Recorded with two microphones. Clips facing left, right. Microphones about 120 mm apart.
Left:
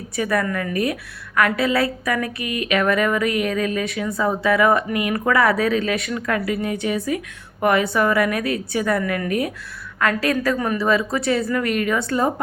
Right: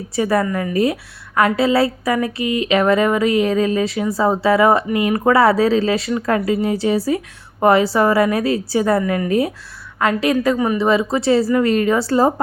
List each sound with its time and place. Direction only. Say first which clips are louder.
0.2 s a woman's voice: right 4 dB; 25° right (ahead or behind)